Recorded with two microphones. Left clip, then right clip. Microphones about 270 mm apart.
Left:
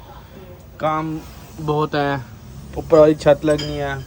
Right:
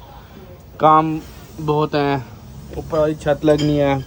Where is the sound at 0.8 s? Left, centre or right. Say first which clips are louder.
Right 9 dB; centre.